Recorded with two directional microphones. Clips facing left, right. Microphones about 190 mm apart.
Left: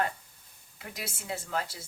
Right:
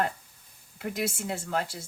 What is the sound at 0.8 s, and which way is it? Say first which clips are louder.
Speech: right 10 dB; 50° right (ahead or behind).